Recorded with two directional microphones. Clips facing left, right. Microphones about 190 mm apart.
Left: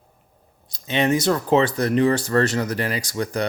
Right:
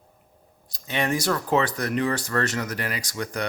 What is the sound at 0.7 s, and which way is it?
Speech, 20° left (ahead or behind).